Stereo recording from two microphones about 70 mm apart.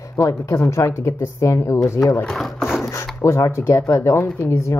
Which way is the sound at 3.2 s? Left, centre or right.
Left.